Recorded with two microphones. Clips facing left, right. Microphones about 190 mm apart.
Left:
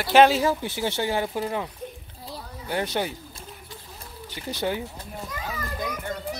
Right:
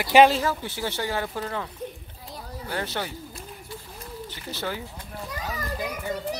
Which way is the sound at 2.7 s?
15° left (ahead or behind).